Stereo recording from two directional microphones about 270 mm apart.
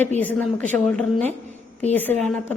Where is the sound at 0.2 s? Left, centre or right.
Centre.